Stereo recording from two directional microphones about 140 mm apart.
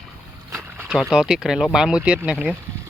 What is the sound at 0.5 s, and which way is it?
Speech, 5° right (ahead or behind).